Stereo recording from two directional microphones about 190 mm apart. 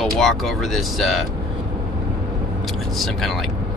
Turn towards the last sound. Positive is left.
turn(degrees=0)  # may be behind; listen again after turning